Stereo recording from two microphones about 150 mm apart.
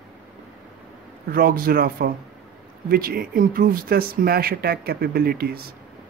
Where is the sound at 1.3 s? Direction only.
80° right.